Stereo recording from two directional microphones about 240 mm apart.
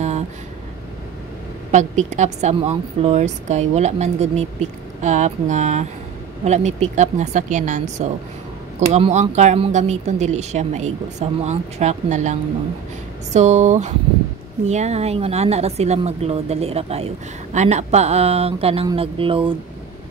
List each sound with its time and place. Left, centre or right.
1.7 s a woman's voice: right